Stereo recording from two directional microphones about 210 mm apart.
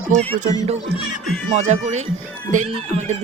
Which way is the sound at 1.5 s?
30° right (ahead or behind).